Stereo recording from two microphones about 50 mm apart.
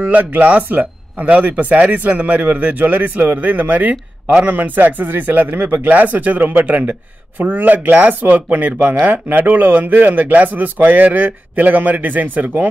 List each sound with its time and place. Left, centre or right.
0.0 s speech: right